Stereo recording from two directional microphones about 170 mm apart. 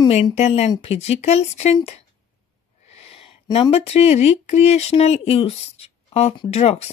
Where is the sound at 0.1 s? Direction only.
40° left (ahead or behind).